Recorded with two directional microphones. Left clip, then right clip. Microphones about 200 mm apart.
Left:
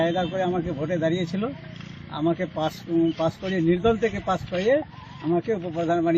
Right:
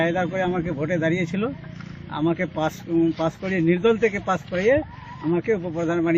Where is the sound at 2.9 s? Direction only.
15° right (ahead or behind).